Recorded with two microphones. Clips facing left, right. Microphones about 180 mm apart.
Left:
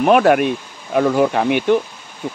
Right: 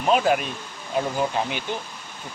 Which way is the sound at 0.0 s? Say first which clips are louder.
Left 8 dB; 65° left (ahead or behind).